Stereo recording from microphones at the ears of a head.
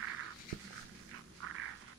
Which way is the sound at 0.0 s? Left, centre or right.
Right.